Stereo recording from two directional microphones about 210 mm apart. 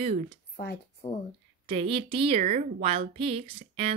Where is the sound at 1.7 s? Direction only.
25° right (ahead or behind).